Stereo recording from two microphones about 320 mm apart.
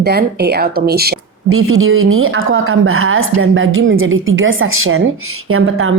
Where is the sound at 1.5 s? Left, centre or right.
Right.